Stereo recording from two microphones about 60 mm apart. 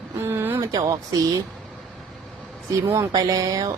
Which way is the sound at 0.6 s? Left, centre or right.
Right.